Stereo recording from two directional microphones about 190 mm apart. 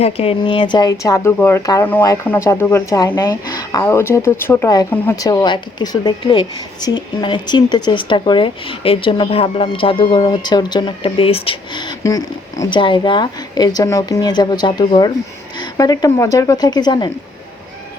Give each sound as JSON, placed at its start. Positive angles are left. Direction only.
{"t": 0.0, "sound": "speech", "side_deg": 30}